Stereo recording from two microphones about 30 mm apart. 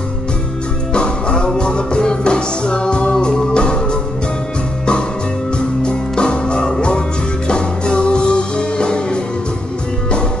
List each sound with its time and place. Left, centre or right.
0.9 s music: left
5.8 s music: left